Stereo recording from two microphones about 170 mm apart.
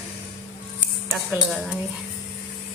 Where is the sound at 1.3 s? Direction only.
5° right (ahead or behind).